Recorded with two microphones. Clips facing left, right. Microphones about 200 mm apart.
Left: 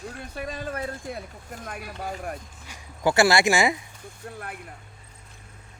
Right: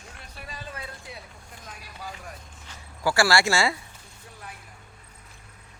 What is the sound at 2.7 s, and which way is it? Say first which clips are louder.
Speech: left 3 dB; 20° left (ahead or behind).